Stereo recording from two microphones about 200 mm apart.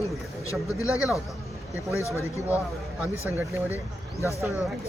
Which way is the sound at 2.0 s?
15° left (ahead or behind).